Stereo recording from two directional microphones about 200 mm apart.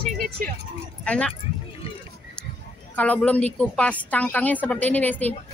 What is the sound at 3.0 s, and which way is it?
Speech, 5° left (ahead or behind).